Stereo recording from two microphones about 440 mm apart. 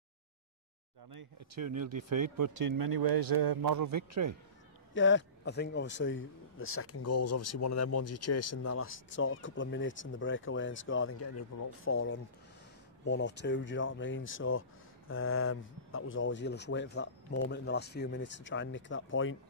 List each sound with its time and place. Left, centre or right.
1.1 s a man's voice: right
4.9 s speech: left